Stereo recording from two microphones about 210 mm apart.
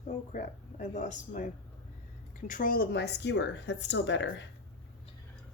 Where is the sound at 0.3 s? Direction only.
35° left (ahead or behind).